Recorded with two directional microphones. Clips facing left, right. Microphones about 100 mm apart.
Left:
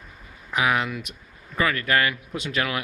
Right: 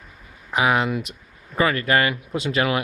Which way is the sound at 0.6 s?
5° right (ahead or behind).